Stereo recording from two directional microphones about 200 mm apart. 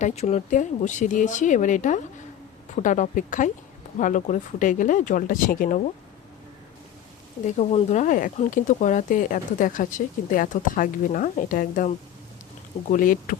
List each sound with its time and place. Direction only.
0.0 s speech: 35° left (ahead or behind)
7.4 s speech: 35° left (ahead or behind)